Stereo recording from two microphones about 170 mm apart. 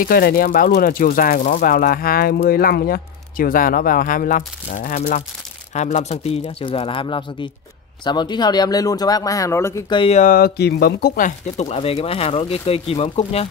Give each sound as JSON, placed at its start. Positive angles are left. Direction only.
{"t": 0.0, "sound": "speech", "side_deg": 60}
{"t": 9.9, "sound": "speech", "side_deg": 35}
{"t": 10.2, "sound": "speech", "side_deg": 65}